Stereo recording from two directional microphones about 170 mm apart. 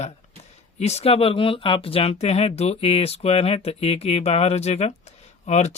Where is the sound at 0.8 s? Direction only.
40° left (ahead or behind).